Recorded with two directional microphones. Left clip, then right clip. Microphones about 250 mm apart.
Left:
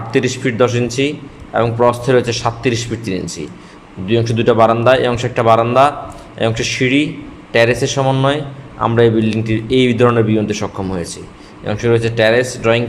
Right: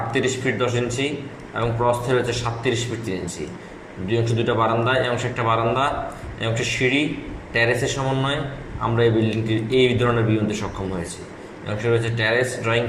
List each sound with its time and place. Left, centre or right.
0.1 s a man's voice: left